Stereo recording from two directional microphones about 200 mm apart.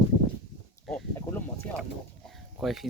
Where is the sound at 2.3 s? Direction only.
Centre (ahead or behind).